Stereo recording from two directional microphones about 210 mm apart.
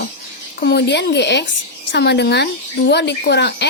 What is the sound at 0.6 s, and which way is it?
A woman's voice, 50° left (ahead or behind).